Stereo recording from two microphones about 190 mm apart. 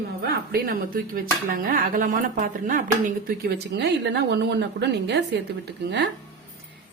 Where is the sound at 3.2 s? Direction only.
60° right (ahead or behind).